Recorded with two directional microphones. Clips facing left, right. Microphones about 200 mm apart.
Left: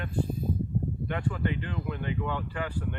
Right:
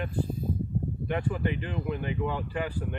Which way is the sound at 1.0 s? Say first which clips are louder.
Right 3 dB; 15° right (ahead or behind).